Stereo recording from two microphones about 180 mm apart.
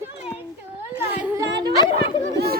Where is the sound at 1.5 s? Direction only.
25° right (ahead or behind).